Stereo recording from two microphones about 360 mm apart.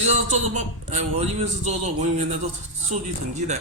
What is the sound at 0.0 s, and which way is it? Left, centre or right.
A man's voice, centre.